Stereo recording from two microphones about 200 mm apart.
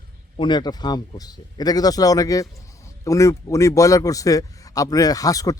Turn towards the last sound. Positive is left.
turn(degrees=15)  # may be behind; listen again after turning